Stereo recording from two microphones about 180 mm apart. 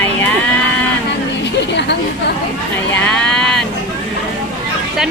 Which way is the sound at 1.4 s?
75° left (ahead or behind).